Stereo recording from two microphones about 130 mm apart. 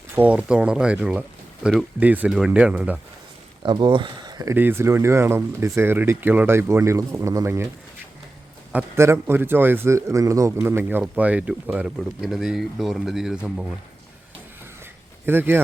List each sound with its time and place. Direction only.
0.2 s speech: 10° right (ahead or behind)
3.6 s speech: 35° right (ahead or behind)
4.5 s speech: 15° right (ahead or behind)
8.7 s speech: 20° right (ahead or behind)
15.3 s speech: 15° right (ahead or behind)